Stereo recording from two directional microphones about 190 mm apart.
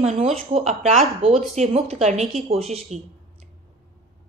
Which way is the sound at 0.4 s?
30° right (ahead or behind).